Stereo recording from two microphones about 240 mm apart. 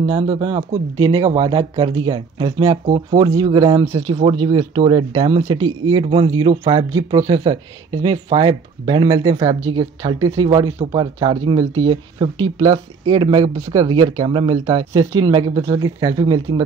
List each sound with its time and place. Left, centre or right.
0.1 s speech: right